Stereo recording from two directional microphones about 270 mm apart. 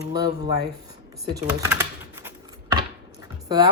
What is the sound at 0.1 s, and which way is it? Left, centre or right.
Speech, centre.